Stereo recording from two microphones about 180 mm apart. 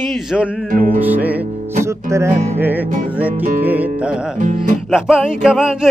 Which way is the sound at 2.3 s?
35° right (ahead or behind).